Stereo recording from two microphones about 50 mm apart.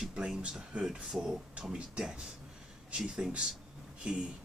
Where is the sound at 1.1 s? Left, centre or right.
Centre.